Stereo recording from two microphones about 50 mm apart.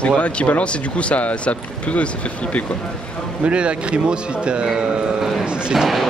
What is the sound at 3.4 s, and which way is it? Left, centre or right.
A man's voice, right.